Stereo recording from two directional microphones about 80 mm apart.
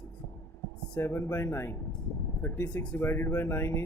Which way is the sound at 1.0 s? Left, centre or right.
Left.